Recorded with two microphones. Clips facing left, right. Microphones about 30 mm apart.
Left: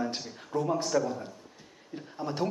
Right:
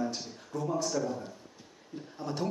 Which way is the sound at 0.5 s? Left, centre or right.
Left.